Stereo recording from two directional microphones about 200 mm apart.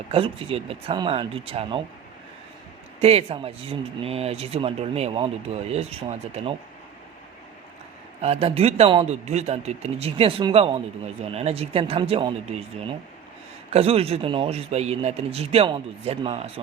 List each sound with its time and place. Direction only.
0.1 s a man's voice: 30° right (ahead or behind)
3.0 s speech: 30° right (ahead or behind)
8.2 s a man's voice: 30° right (ahead or behind)